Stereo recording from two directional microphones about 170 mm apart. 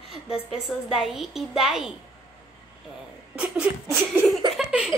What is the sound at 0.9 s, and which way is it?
A child's voice, centre (ahead or behind).